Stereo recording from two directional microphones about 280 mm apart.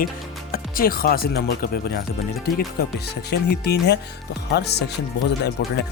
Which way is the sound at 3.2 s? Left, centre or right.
Left.